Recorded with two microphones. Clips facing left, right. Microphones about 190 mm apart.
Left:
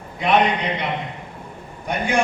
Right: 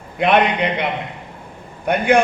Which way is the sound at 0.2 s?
60° right (ahead or behind).